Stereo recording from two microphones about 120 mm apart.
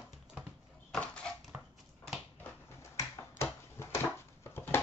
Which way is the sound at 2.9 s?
20° left (ahead or behind).